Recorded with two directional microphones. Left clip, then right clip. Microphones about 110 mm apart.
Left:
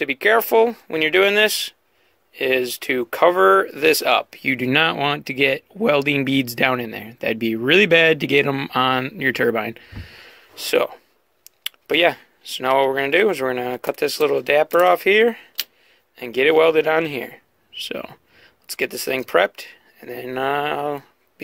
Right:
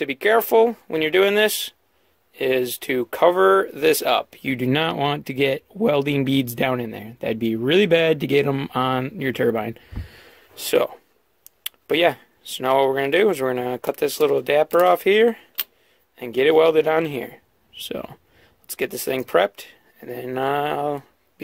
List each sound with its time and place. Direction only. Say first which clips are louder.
0.0 s speech: left 2 dB; 15° right (ahead or behind)